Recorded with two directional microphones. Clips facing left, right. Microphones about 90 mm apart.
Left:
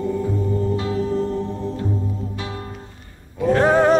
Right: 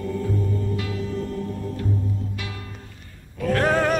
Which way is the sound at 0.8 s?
30° left (ahead or behind).